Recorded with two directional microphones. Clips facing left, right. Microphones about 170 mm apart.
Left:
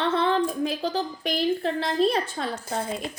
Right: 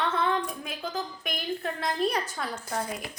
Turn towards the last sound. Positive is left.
turn(degrees=25)  # may be behind; listen again after turning